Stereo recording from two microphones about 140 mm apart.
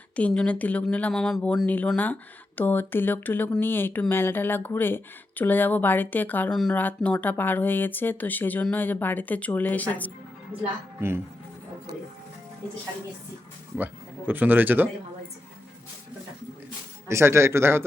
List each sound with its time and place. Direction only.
0.2 s speech: 10° left (ahead or behind)
13.7 s speech: 10° right (ahead or behind)
17.1 s a man's voice: 20° right (ahead or behind)